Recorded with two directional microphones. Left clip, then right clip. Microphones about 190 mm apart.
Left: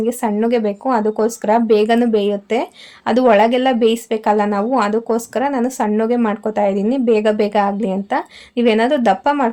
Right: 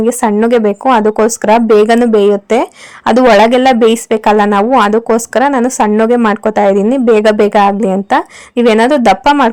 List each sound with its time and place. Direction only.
0.0 s speech: 35° right (ahead or behind)